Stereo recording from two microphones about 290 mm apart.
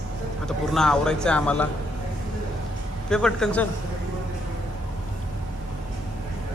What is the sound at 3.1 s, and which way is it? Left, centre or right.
Speech, centre.